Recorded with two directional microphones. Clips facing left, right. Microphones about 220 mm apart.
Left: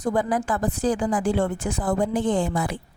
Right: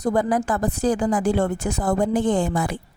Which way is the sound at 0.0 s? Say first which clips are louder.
Right 3 dB; 40° right (ahead or behind).